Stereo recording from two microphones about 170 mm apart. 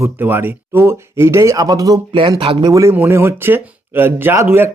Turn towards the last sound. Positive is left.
turn(degrees=-15)  # may be behind; listen again after turning